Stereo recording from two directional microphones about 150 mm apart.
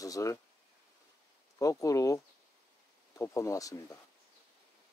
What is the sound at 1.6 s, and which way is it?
Speech, 20° left (ahead or behind).